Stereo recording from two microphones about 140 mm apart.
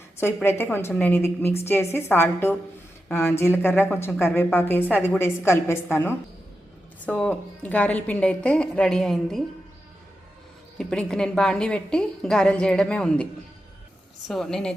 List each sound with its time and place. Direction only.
0.4 s a woman's voice: 15° left (ahead or behind)
10.8 s a woman's voice: 5° left (ahead or behind)
14.3 s a woman's voice: 5° left (ahead or behind)